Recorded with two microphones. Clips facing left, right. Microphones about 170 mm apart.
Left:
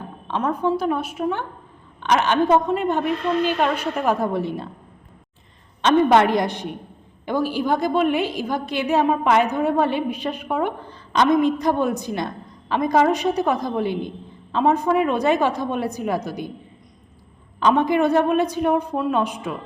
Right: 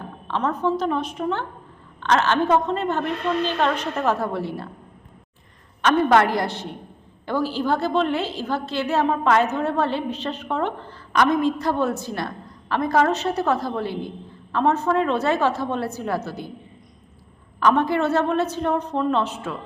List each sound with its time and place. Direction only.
0.3 s a woman's voice: 15° left (ahead or behind)
5.8 s a woman's voice: 20° left (ahead or behind)
17.6 s a woman's voice: 15° left (ahead or behind)